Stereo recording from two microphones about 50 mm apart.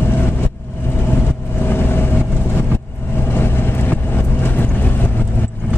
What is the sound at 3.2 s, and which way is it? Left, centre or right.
Vehicle, left.